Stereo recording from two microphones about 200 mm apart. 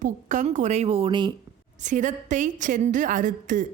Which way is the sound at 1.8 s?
40° right (ahead or behind).